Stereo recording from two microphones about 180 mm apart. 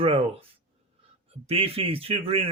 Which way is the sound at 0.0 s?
30° right (ahead or behind).